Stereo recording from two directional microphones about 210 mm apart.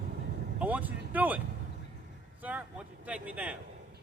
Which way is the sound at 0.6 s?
10° right (ahead or behind).